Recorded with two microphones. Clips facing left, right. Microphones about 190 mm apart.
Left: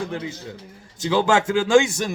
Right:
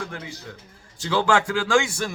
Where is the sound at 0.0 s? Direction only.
20° left (ahead or behind).